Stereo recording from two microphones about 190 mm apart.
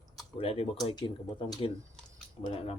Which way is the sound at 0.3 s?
30° left (ahead or behind).